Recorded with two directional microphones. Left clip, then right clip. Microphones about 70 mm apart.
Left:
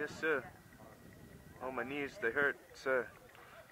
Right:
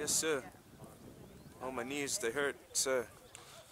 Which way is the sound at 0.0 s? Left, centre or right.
Right.